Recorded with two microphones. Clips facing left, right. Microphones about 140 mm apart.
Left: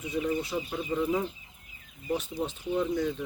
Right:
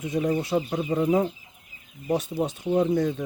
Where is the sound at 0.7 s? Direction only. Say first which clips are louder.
Right 5 dB; 45° right (ahead or behind).